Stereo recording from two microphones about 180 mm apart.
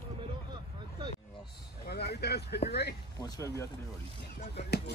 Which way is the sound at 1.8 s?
65° left (ahead or behind).